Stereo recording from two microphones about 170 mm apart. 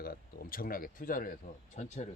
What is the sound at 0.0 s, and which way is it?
Speech, 60° left (ahead or behind).